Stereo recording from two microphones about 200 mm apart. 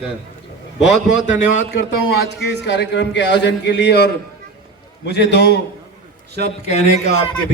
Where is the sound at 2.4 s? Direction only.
60° left (ahead or behind).